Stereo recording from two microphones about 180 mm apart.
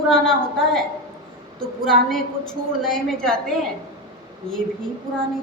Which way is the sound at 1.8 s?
Centre (ahead or behind).